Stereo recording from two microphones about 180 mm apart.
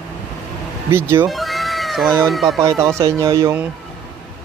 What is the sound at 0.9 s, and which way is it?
Mantra, 15° right (ahead or behind).